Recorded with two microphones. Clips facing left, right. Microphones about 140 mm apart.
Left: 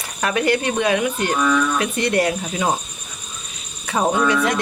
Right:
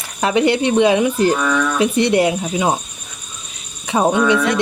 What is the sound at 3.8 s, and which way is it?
Speech, 20° right (ahead or behind).